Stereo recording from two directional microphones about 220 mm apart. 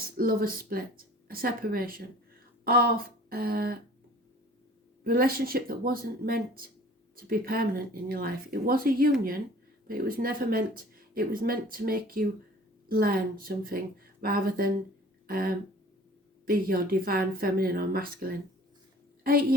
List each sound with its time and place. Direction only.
0.2 s speech: 40° right (ahead or behind)
5.0 s speech: 40° right (ahead or behind)